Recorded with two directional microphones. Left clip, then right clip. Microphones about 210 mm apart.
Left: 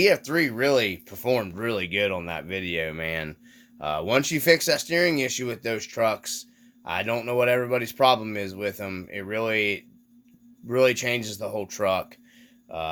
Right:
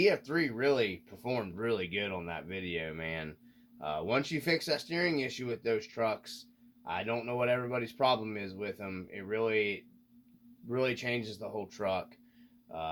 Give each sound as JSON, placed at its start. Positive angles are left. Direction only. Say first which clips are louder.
{"t": 0.0, "sound": "speech", "louder": "left 8 dB", "side_deg": 45}